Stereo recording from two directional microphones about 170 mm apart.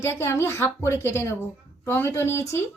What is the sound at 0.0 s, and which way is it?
Speech, 15° left (ahead or behind).